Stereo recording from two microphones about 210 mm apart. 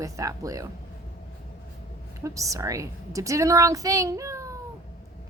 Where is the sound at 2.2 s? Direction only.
15° right (ahead or behind).